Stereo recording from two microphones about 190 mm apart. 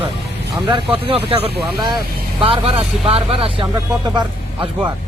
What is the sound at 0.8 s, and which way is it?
Speech, 30° right (ahead or behind).